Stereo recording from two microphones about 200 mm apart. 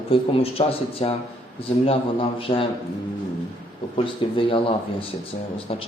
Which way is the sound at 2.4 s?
25° left (ahead or behind).